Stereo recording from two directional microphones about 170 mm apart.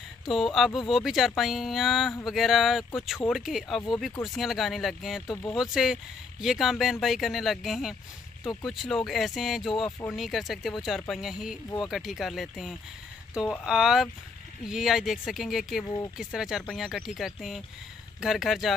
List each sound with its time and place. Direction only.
0.2 s speech: centre (ahead or behind)
5.2 s speech: 15° left (ahead or behind)
5.5 s speech: 5° right (ahead or behind)
9.8 s speech: 10° left (ahead or behind)
10.1 s speech: centre (ahead or behind)